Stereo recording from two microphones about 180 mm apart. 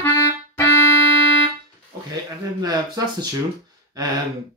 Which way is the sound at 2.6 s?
25° right (ahead or behind).